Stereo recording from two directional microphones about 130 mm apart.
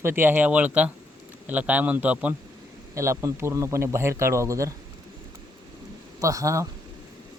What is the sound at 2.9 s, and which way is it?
Speech, 25° right (ahead or behind).